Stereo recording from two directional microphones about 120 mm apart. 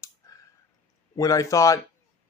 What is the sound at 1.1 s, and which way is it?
Speech, 25° left (ahead or behind).